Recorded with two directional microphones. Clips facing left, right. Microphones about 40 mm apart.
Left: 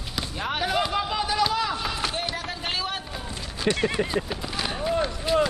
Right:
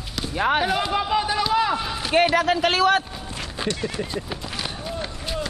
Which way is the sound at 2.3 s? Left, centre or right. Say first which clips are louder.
Right 11 dB; right.